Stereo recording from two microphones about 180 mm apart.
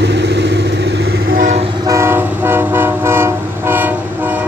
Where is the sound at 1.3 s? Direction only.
40° right (ahead or behind).